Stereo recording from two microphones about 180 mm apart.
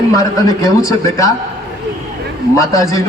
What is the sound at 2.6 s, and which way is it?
Speech, 20° left (ahead or behind).